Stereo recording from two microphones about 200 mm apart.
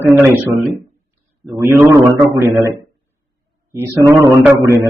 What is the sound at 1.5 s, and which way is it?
A man's voice, 15° right (ahead or behind).